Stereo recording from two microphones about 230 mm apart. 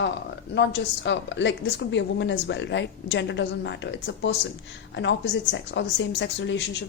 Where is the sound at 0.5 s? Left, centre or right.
Left.